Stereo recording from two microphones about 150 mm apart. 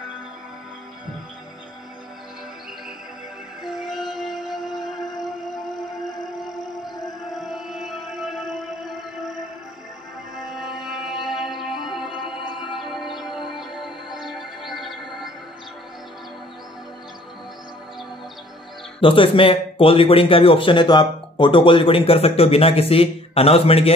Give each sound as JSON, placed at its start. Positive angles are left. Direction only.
{"t": 3.6, "sound": "music", "side_deg": 0}
{"t": 6.4, "sound": "music", "side_deg": 0}
{"t": 10.3, "sound": "music", "side_deg": 0}
{"t": 12.4, "sound": "music", "side_deg": 30}
{"t": 12.7, "sound": "music", "side_deg": 0}
{"t": 18.9, "sound": "speech", "side_deg": 35}